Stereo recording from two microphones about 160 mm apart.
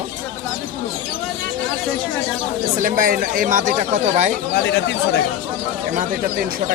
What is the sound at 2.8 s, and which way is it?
Speech, 60° right (ahead or behind).